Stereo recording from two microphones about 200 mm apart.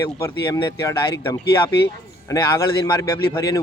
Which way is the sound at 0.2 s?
15° left (ahead or behind).